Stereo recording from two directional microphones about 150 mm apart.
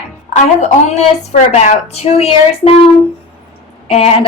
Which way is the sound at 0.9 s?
50° left (ahead or behind).